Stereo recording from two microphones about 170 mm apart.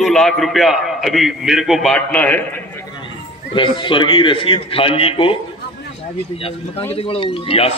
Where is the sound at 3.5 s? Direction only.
30° left (ahead or behind).